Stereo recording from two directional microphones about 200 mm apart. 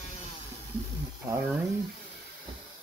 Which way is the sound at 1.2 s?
15° right (ahead or behind).